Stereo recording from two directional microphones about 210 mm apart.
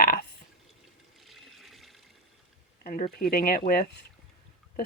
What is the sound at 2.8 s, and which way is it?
Speech, 40° left (ahead or behind).